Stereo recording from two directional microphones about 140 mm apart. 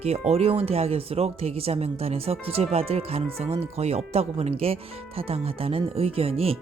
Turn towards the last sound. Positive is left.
turn(degrees=-45)  # may be behind; listen again after turning